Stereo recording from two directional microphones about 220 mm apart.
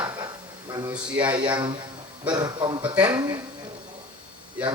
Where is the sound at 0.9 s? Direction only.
5° right (ahead or behind).